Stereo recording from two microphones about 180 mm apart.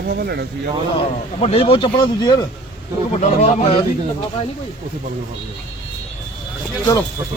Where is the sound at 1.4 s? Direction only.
30° left (ahead or behind).